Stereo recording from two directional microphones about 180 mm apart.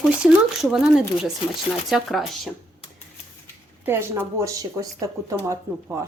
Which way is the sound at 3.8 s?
10° right (ahead or behind).